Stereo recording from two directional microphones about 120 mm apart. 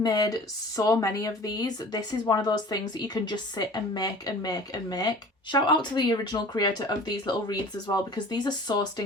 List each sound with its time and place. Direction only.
0.0 s speech: 30° left (ahead or behind)